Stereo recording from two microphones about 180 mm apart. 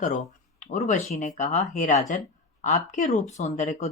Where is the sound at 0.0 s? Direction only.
45° left (ahead or behind).